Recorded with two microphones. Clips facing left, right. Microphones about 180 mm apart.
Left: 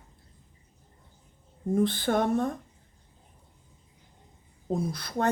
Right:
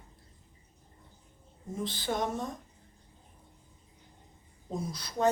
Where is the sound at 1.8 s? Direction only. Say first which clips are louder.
Left 7 dB; 55° left (ahead or behind).